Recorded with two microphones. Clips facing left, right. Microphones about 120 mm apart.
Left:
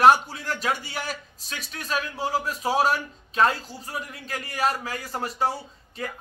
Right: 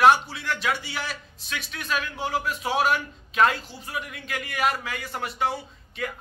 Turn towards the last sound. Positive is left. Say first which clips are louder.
# right 1 dB
turn(degrees=35)  # may be behind; listen again after turning